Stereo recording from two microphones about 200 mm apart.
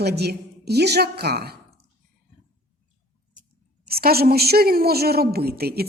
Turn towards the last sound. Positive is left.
turn(degrees=-50)  # may be behind; listen again after turning